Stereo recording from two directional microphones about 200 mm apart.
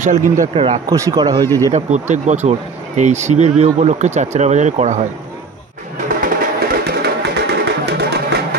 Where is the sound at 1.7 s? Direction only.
35° right (ahead or behind).